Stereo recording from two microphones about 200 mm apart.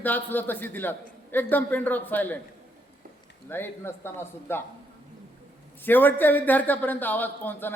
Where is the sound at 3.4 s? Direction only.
10° left (ahead or behind).